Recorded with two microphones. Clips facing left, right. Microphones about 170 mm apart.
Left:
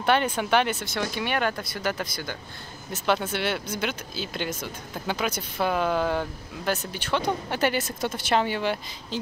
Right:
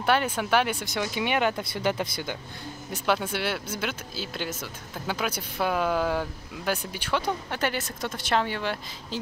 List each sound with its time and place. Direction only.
0.0 s speech: 5° right (ahead or behind); by 2.3 s 20° right (ahead or behind)
2.9 s speech: 10° right (ahead or behind)
7.5 s speech: 5° left (ahead or behind)